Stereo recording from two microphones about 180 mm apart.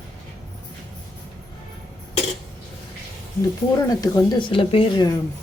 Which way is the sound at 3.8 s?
20° left (ahead or behind).